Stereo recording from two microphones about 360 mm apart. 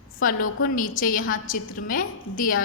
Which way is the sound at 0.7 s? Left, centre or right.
Left.